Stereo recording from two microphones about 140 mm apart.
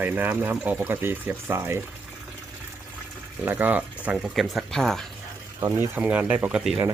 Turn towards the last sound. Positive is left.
turn(degrees=-10)  # may be behind; listen again after turning